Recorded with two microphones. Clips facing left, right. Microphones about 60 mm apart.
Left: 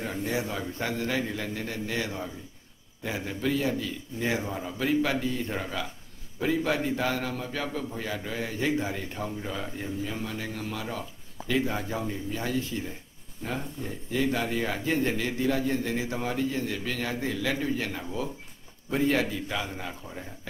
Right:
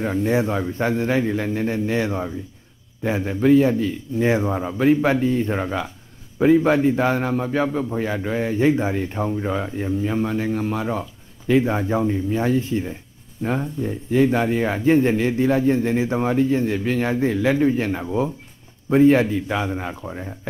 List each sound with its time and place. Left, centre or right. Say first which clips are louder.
0.0 s a man's voice: right 10 dB; right